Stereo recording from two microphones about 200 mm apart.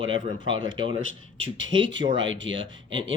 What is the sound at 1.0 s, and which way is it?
Speech, 80° right.